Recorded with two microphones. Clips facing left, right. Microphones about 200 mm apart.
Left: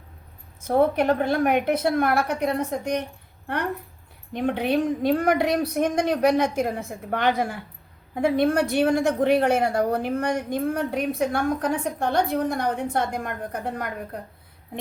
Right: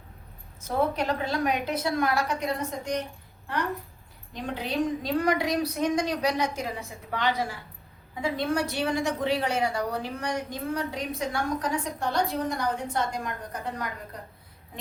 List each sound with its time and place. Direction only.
0.6 s a woman's voice: 55° left (ahead or behind)